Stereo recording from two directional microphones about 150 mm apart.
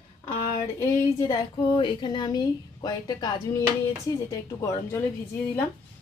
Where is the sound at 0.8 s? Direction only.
20° left (ahead or behind).